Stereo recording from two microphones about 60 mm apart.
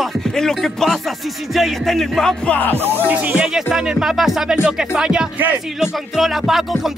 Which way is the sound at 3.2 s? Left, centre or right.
Centre.